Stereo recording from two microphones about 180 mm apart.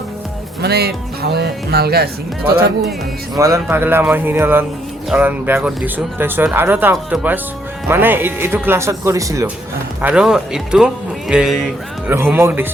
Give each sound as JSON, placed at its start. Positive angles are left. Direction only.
{"t": 0.6, "sound": "speech", "side_deg": -60}
{"t": 3.3, "sound": "speech", "side_deg": -15}
{"t": 10.0, "sound": "speech", "side_deg": -5}